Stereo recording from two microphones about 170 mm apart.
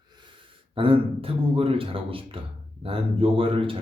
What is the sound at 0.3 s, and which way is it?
Speech, 30° right (ahead or behind).